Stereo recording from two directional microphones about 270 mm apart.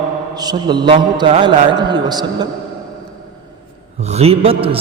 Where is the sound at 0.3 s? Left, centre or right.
Centre.